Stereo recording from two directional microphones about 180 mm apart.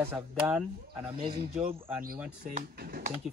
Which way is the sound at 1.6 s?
55° right (ahead or behind).